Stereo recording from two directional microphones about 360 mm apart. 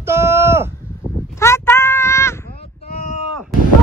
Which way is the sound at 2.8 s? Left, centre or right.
Centre.